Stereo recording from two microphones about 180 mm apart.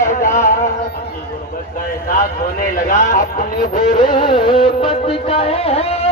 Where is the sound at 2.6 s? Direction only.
50° left (ahead or behind).